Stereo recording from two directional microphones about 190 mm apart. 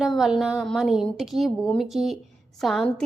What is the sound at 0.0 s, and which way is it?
A woman's voice, centre (ahead or behind).